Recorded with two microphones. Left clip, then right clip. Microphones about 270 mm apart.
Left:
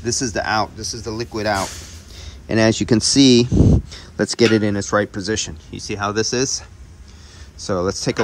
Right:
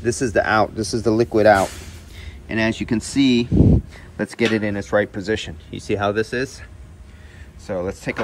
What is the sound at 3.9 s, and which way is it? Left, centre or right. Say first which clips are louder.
Speech: left 6 dB; centre.